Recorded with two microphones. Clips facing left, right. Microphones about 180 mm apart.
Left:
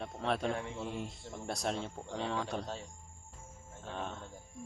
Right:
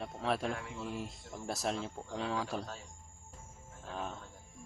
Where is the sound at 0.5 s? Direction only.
30° left (ahead or behind).